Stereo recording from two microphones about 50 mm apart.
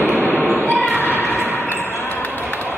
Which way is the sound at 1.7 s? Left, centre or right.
Left.